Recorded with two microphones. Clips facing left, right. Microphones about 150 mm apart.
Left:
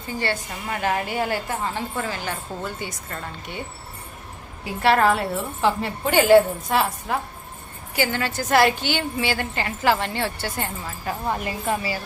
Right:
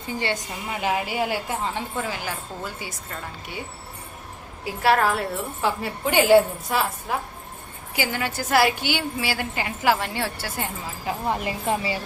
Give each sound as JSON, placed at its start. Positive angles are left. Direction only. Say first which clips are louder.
{"t": 0.1, "sound": "a woman's voice", "louder": "left 1 dB", "side_deg": -15}
{"t": 4.6, "sound": "a woman's voice", "louder": "left 2 dB", "side_deg": 0}